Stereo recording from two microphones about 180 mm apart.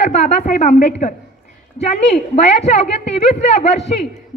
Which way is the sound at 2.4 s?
40° left (ahead or behind).